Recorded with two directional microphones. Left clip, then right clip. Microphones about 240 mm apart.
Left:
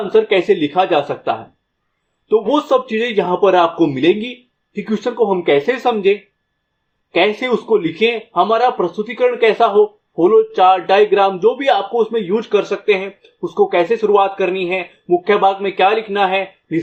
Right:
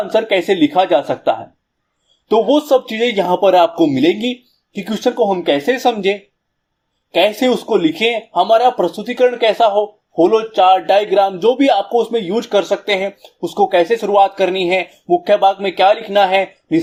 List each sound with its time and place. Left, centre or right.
0.3 s speech: right